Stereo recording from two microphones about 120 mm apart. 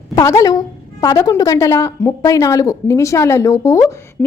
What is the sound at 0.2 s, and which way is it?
A woman's voice, 30° left (ahead or behind).